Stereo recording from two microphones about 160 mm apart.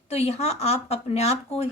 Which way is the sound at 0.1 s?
40° left (ahead or behind).